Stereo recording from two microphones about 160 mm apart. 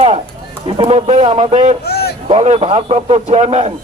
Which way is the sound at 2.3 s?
40° right (ahead or behind).